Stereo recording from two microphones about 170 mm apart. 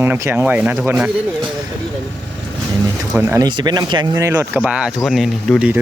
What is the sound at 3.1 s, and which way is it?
Speech, 15° right (ahead or behind).